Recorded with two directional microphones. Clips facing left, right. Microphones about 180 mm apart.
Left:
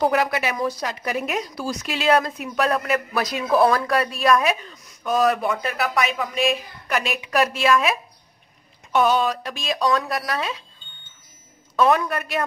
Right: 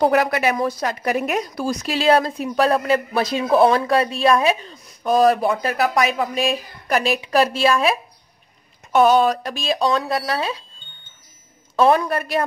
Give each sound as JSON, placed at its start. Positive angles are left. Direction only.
{"t": 0.0, "sound": "speech", "side_deg": -45}
{"t": 1.8, "sound": "speech", "side_deg": -35}
{"t": 8.9, "sound": "speech", "side_deg": -45}
{"t": 11.7, "sound": "speech", "side_deg": -30}